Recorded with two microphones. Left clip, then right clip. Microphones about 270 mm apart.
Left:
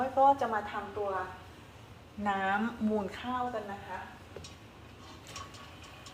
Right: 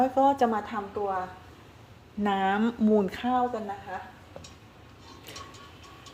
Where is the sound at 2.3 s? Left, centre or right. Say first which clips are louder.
Right 4 dB; right.